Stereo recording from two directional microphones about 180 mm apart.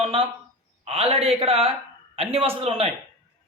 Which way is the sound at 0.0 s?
30° right (ahead or behind).